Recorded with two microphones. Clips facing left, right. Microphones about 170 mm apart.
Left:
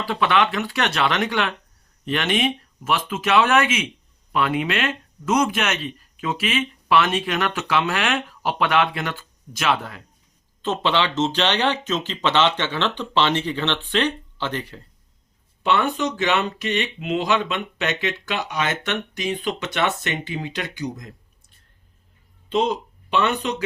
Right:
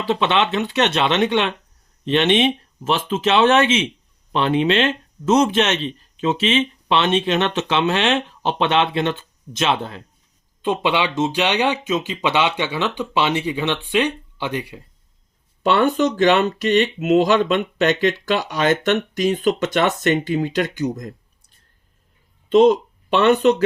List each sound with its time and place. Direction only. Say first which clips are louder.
0.0 s speech: right 2 dB; 25° right (ahead or behind)
10.6 s speech: right 2 dB; 15° right (ahead or behind)
15.6 s speech: right 5 dB; 40° right (ahead or behind)
22.4 s speech: right 9 dB; 45° right (ahead or behind)